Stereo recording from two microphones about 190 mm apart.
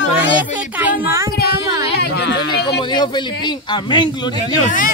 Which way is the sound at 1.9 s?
60° left (ahead or behind).